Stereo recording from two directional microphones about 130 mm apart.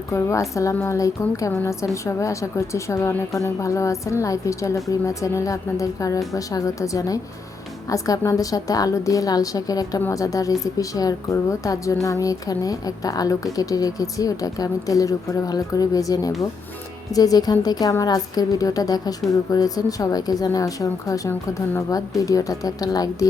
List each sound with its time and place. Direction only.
0.1 s a woman's voice: 20° left (ahead or behind)